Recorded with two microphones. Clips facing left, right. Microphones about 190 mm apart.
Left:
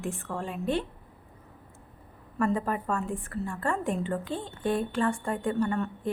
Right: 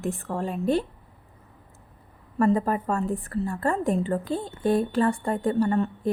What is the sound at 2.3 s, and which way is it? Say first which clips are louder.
A woman's voice: right 5 dB; 35° right (ahead or behind).